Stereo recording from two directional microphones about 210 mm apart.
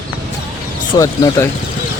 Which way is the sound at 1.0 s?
15° left (ahead or behind).